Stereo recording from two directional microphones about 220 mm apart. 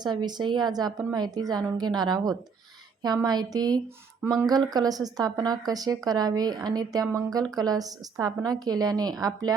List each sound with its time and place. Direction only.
0.0 s a woman's voice: 20° right (ahead or behind)